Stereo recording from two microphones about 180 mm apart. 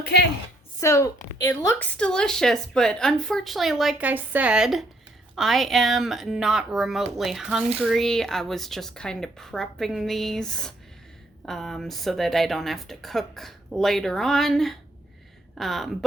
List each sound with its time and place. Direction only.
0.0 s a woman's voice: 65° left (ahead or behind)
0.8 s speech: 15° left (ahead or behind)